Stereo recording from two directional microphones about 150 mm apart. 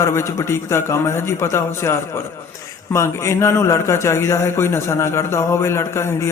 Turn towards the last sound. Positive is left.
turn(degrees=15)  # may be behind; listen again after turning